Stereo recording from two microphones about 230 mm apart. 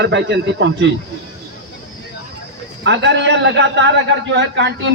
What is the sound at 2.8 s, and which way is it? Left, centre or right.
A man's voice, right.